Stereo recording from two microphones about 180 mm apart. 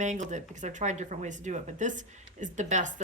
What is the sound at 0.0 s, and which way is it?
Speech, 40° right (ahead or behind).